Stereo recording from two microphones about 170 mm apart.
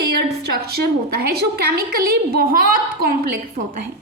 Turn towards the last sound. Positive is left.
turn(degrees=-60)  # may be behind; listen again after turning